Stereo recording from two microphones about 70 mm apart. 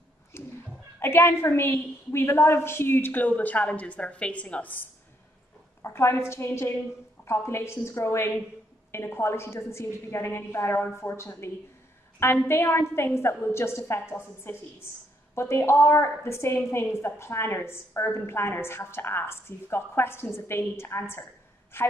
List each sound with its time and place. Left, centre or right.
0.3 s a sound: left
0.9 s a woman's voice: left
5.8 s a woman's voice: left